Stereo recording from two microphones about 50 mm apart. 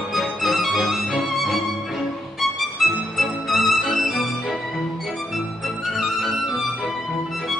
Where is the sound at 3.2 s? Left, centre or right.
Centre.